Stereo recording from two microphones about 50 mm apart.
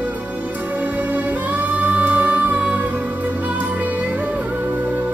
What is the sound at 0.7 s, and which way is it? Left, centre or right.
Music, right.